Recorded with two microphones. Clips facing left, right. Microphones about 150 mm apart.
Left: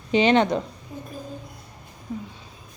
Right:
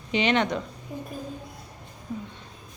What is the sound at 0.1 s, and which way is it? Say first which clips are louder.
Speech: left 5 dB; 35° left (ahead or behind).